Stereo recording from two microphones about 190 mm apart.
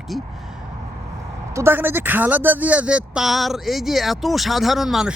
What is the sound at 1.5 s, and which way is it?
Speech, 10° right (ahead or behind).